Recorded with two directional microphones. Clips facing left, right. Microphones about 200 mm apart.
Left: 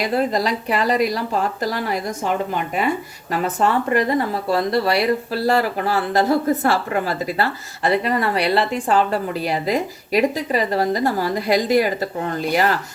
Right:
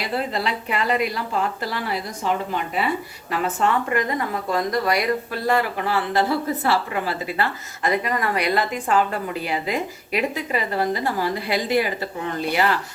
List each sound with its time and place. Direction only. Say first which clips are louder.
0.0 s speech: left 5 dB; 40° left (ahead or behind)
3.4 s speech: left 2 dB; 35° left (ahead or behind)